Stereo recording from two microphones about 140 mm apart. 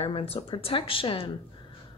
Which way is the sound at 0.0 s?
45° left (ahead or behind).